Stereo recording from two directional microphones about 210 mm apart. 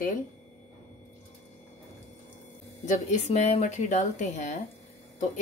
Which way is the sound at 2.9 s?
35° left (ahead or behind).